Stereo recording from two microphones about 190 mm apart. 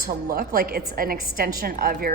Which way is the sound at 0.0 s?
55° right (ahead or behind).